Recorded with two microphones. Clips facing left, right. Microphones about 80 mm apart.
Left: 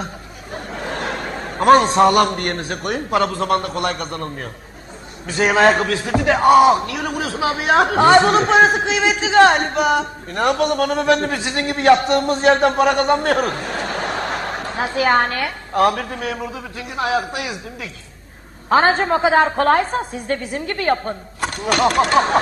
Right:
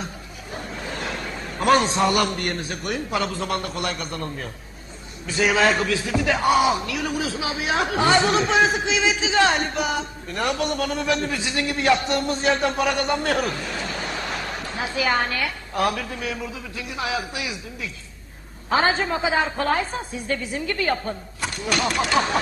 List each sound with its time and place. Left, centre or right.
0.5 s a man's voice: left
18.7 s a man's voice: left